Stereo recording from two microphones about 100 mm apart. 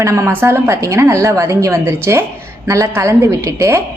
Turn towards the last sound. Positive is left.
turn(degrees=-30)  # may be behind; listen again after turning